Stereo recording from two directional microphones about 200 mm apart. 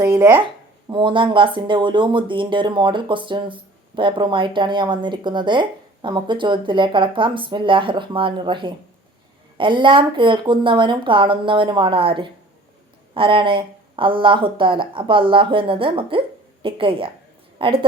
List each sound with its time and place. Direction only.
0.0 s speech: 15° right (ahead or behind)
0.9 s speech: 25° right (ahead or behind)